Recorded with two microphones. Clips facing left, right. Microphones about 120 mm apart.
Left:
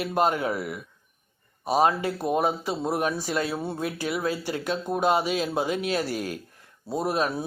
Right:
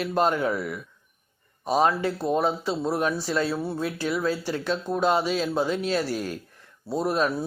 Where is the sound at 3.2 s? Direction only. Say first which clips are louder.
Right 2 dB; 45° left (ahead or behind).